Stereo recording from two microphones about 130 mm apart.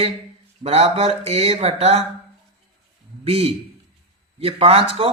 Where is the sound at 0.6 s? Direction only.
55° right (ahead or behind).